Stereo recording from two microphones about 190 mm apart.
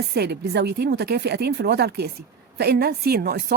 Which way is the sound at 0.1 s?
55° right (ahead or behind).